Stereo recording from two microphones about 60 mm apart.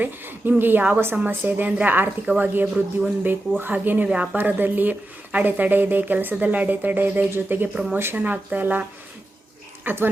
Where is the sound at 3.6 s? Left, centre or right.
Right.